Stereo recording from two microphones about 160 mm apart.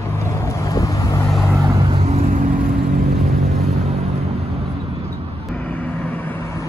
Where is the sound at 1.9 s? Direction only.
45° right (ahead or behind).